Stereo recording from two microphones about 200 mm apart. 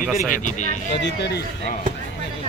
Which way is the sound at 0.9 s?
55° left (ahead or behind).